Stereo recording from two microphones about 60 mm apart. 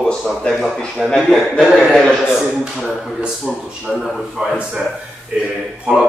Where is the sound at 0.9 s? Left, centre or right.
Centre.